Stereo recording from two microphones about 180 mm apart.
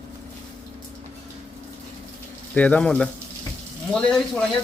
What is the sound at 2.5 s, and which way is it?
Speech, 5° left (ahead or behind).